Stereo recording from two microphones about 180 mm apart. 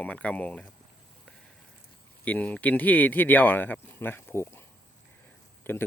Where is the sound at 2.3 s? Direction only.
10° left (ahead or behind).